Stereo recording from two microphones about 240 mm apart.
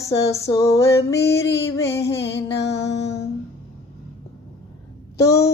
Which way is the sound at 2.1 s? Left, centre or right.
Left.